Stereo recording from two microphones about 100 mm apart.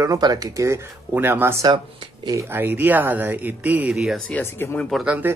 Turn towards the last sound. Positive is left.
turn(degrees=-15)  # may be behind; listen again after turning